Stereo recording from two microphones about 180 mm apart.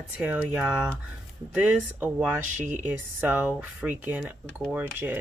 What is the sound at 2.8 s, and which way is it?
Speech, 10° right (ahead or behind).